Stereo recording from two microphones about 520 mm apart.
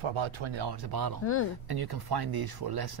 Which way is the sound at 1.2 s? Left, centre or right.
Left.